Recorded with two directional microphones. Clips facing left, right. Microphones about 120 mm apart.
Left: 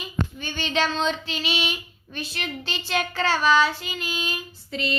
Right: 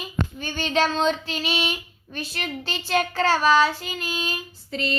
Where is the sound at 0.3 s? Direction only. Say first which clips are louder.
Right 4 dB; 40° right (ahead or behind).